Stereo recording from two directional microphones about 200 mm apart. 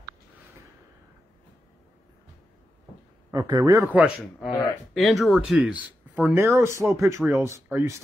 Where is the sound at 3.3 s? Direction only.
15° right (ahead or behind).